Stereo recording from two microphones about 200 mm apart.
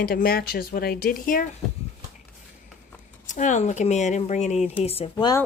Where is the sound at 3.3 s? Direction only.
40° left (ahead or behind); by 5.4 s 20° left (ahead or behind).